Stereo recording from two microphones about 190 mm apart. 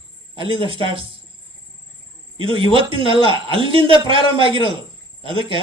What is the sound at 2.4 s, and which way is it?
A man's voice, 25° right (ahead or behind).